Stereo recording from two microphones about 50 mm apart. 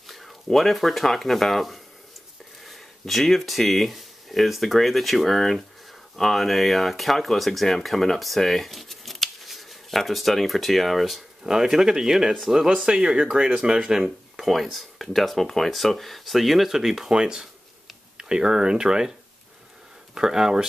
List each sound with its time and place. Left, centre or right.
0.0 s speech: centre
12.9 s speech: centre
20.2 s speech: centre